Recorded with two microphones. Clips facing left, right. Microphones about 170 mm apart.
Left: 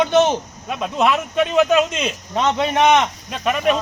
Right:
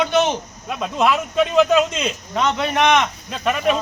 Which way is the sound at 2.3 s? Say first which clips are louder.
Left 2 dB; 30° left (ahead or behind).